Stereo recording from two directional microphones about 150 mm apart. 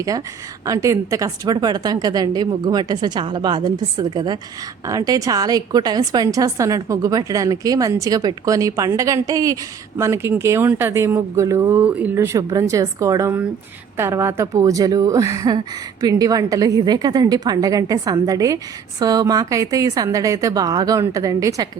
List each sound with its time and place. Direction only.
0.1 s a woman's voice: 25° right (ahead or behind)